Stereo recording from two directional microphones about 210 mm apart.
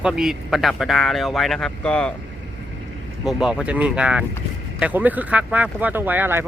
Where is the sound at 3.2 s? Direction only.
Centre (ahead or behind).